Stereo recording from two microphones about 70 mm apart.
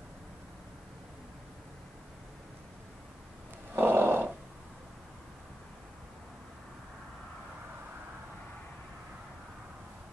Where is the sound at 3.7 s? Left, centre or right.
Right.